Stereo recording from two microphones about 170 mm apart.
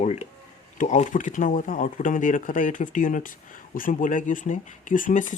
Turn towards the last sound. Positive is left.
turn(degrees=50)  # may be behind; listen again after turning